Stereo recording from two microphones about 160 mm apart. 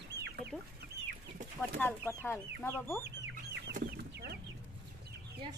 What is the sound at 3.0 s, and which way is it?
Chicken, 90° right.